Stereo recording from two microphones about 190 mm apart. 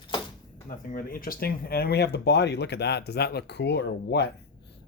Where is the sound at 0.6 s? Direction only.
45° left (ahead or behind); by 4.3 s 65° left (ahead or behind).